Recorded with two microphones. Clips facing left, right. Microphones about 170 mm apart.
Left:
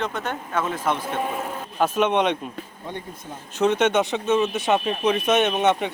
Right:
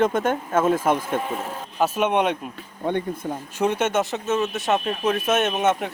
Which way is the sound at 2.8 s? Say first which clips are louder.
Right 12 dB; 60° right (ahead or behind).